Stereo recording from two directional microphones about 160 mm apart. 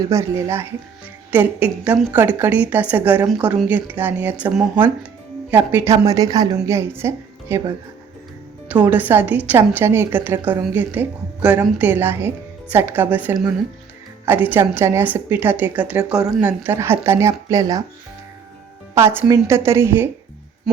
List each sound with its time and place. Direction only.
0.1 s a woman's voice: 15° right (ahead or behind)
5.5 s a woman's voice: 15° right (ahead or behind)
8.7 s a woman's voice: 10° right (ahead or behind)
18.9 s a woman's voice: 15° right (ahead or behind)